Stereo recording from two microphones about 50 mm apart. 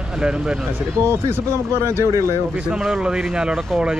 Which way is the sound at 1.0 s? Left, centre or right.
Right.